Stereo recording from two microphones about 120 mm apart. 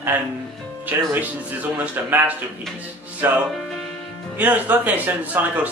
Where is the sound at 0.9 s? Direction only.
15° right (ahead or behind).